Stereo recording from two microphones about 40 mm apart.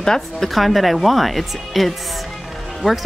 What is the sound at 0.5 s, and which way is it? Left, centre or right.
Speech, centre.